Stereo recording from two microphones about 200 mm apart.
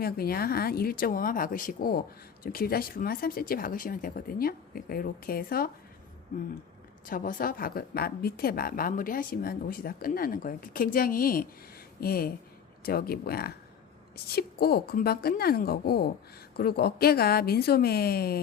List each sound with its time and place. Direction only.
0.0 s speech: 50° left (ahead or behind)
7.1 s speech: 40° left (ahead or behind)